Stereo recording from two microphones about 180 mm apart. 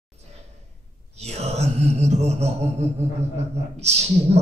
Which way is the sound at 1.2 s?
35° right (ahead or behind).